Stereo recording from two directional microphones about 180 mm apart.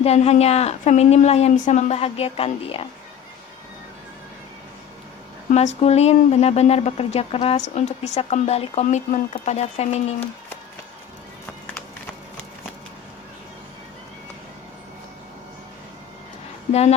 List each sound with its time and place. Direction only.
0.0 s speech: 35° left (ahead or behind)
5.5 s speech: 40° left (ahead or behind)